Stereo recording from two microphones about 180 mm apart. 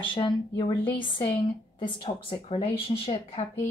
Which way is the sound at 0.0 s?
30° left (ahead or behind).